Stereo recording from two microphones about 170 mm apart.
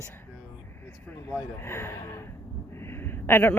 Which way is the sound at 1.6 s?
15° left (ahead or behind).